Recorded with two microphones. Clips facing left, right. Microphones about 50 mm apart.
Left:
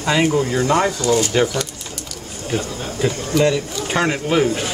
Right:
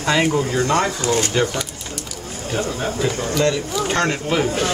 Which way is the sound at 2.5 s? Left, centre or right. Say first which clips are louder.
Right 2 dB; right.